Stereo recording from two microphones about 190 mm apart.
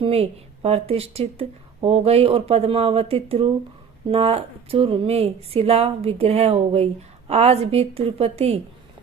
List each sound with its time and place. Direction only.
0.0 s speech: 30° right (ahead or behind)